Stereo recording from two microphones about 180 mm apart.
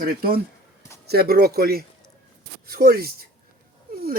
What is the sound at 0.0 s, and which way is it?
Speech, 55° right (ahead or behind).